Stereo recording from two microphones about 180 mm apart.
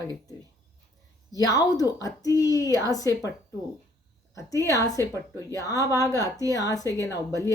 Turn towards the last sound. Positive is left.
turn(degrees=20)  # may be behind; listen again after turning